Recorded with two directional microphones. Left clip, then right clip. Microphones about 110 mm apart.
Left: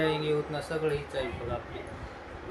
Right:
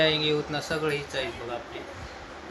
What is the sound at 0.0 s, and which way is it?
Speech, 25° right (ahead or behind).